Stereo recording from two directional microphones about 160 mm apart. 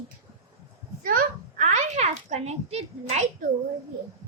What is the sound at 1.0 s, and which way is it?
A child's voice, 60° right (ahead or behind).